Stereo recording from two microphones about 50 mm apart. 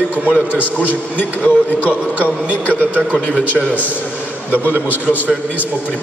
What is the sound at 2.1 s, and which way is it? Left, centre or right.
Speech, right.